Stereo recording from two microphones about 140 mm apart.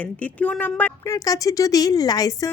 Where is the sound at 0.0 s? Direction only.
10° left (ahead or behind).